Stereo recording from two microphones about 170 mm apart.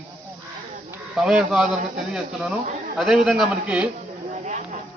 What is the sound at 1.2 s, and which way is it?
A man's voice, 5° right (ahead or behind).